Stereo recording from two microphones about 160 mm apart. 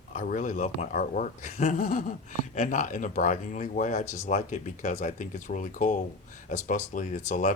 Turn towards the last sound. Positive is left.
turn(degrees=50)  # may be behind; listen again after turning